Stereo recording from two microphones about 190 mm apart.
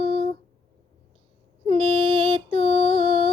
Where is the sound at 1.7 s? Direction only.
30° right (ahead or behind).